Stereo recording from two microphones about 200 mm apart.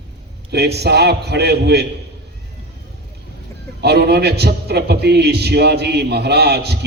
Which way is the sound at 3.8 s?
55° right (ahead or behind).